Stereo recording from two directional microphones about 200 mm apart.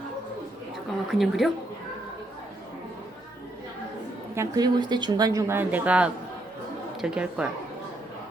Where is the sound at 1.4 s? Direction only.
Centre (ahead or behind).